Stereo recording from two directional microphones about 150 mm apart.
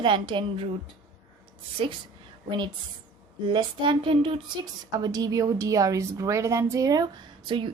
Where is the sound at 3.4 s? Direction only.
30° right (ahead or behind).